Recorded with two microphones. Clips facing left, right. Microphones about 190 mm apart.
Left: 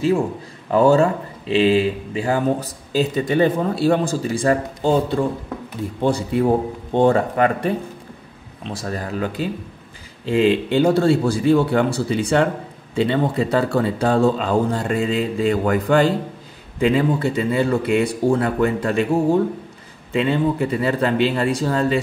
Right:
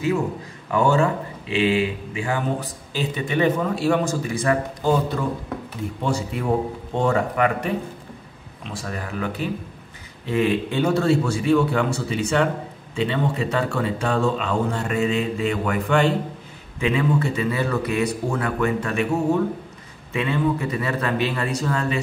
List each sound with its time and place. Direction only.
0.7 s a man's voice: 35° left (ahead or behind)